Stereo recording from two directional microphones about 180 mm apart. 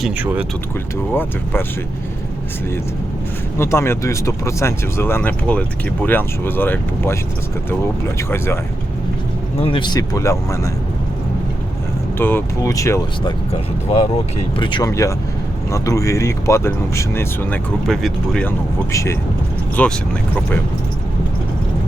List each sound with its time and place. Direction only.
0.0 s speech: 10° right (ahead or behind)
1.1 s speech: 10° left (ahead or behind)
3.6 s speech: 15° left (ahead or behind)
9.6 s speech: 30° left (ahead or behind)
12.2 s speech: 15° left (ahead or behind)
14.6 s speech: 25° left (ahead or behind)
17.8 s speech: centre (ahead or behind)
18.9 s speech: 15° left (ahead or behind)